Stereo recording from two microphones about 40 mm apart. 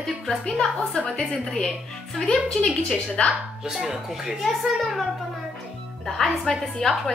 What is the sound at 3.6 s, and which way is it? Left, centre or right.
A child's voice, centre.